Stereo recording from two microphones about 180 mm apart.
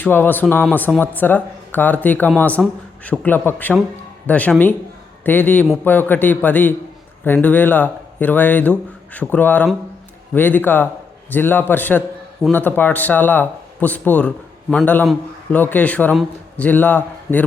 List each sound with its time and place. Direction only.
0.0 s a man's voice: 10° left (ahead or behind)